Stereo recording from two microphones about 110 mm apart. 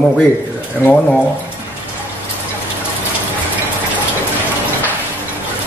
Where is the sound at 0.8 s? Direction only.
15° left (ahead or behind).